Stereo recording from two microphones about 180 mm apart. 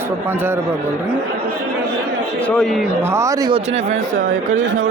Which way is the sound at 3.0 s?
15° right (ahead or behind).